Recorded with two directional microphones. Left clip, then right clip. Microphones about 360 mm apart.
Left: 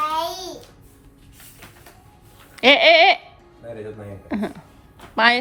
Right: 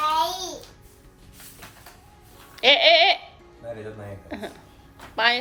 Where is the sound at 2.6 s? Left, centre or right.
Centre.